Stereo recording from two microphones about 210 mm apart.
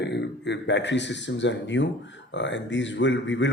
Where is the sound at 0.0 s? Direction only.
55° left (ahead or behind).